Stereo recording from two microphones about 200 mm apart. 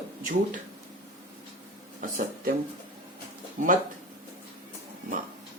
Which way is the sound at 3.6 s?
35° right (ahead or behind).